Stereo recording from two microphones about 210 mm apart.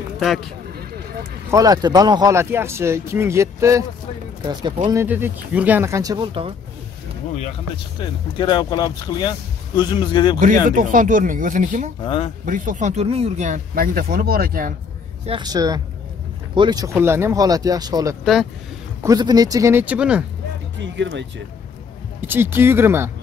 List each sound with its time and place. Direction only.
0.2 s speech: centre (ahead or behind)
1.5 s speech: 15° right (ahead or behind)
4.8 s speech: 10° right (ahead or behind)
8.4 s speech: 20° left (ahead or behind)
10.4 s speech: 40° right (ahead or behind)
15.2 s speech: 20° right (ahead or behind)
18.2 s speech: centre (ahead or behind)
19.0 s speech: 20° right (ahead or behind)
20.8 s speech: 60° right (ahead or behind)
22.2 s speech: 10° right (ahead or behind)